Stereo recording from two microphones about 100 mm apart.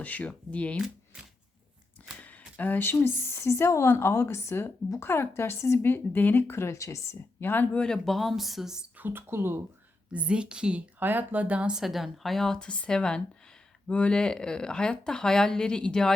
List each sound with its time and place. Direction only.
0.0 s speech: 15° left (ahead or behind)
2.2 s speech: 15° left (ahead or behind); by 8.8 s 5° right (ahead or behind)
9.0 s speech: 20° right (ahead or behind)
10.1 s a woman's voice: 10° right (ahead or behind); by 16.1 s 5° left (ahead or behind)